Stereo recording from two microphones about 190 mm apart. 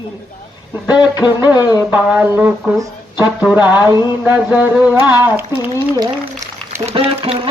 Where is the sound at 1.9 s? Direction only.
10° right (ahead or behind).